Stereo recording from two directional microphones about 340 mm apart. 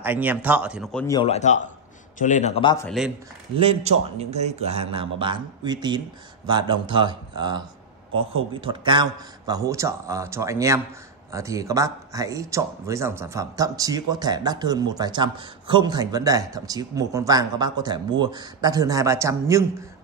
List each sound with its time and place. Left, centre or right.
0.0 s speech: centre
1.0 s a man's voice: centre
3.5 s speech: centre